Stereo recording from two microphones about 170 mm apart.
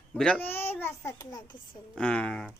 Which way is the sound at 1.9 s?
5° left (ahead or behind).